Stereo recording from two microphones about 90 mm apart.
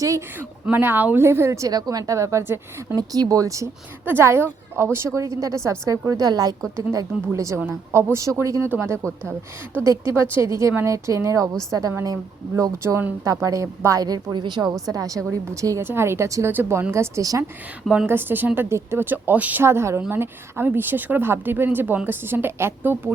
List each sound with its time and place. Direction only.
0.3 s speech: 20° right (ahead or behind)
2.9 s a woman's voice: 45° right (ahead or behind)
4.0 s a woman's voice: 25° right (ahead or behind)
6.1 s a woman's voice: 45° right (ahead or behind)
14.8 s a woman's voice: 40° right (ahead or behind)
15.8 s a woman's voice: 25° right (ahead or behind)
17.9 s speech: 25° right (ahead or behind)
19.6 s a woman's voice: 30° right (ahead or behind)